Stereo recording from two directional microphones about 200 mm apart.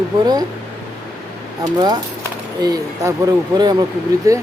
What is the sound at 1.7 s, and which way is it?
Speech, 20° right (ahead or behind).